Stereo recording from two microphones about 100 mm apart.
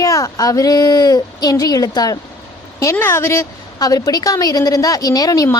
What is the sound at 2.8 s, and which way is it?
Speech, 25° left (ahead or behind).